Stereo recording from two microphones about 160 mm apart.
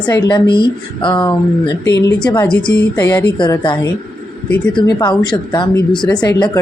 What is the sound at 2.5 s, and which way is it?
Speech, 5° left (ahead or behind).